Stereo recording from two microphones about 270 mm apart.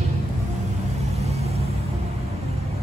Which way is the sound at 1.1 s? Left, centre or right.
Right.